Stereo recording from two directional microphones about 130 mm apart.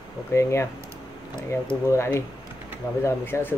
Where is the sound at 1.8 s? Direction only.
20° left (ahead or behind).